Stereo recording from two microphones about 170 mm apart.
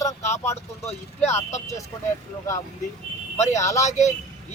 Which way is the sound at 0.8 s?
40° left (ahead or behind).